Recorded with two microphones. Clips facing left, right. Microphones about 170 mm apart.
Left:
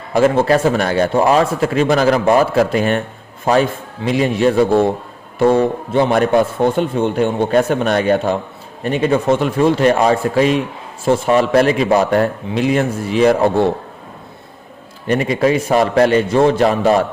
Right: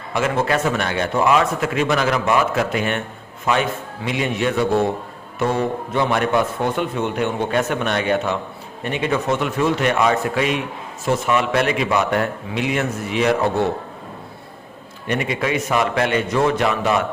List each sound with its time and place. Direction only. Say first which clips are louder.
0.1 s a man's voice: left 7 dB; 35° left (ahead or behind)
15.0 s a man's voice: left 7 dB; 35° left (ahead or behind)